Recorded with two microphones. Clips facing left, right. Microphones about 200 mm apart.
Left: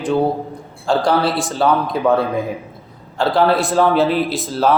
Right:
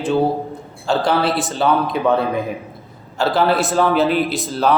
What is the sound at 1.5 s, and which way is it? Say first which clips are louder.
Speech: left 1 dB; centre (ahead or behind).